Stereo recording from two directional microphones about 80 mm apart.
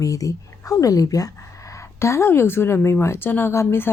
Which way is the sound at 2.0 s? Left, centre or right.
Left.